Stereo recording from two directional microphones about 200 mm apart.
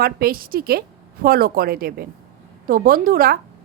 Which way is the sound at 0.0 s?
50° right (ahead or behind).